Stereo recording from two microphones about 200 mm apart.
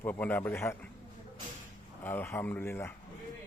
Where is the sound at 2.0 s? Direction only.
10° left (ahead or behind).